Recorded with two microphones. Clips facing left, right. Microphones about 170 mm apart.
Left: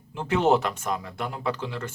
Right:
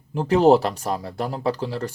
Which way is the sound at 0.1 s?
35° right (ahead or behind).